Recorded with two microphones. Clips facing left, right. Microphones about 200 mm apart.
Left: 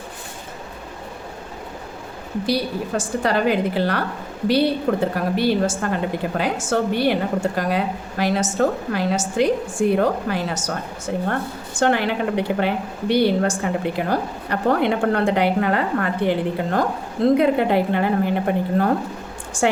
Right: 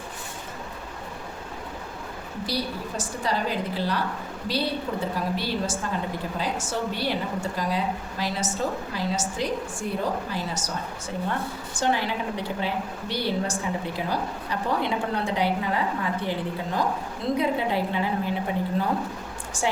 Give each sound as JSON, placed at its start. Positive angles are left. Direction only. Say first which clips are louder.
{"t": 2.5, "sound": "a woman's voice", "louder": "left 8 dB", "side_deg": 65}